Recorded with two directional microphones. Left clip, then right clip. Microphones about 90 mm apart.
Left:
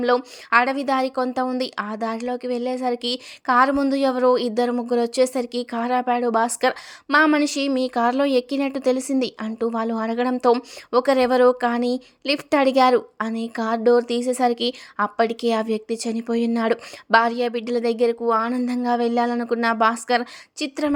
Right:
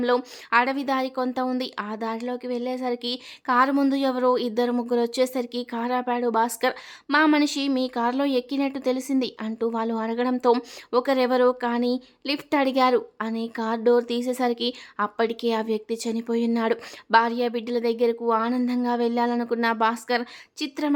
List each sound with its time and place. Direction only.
0.5 s a woman's voice: 25° left (ahead or behind)